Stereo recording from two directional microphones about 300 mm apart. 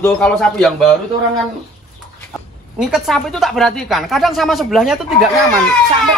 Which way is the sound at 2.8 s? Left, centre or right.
Centre.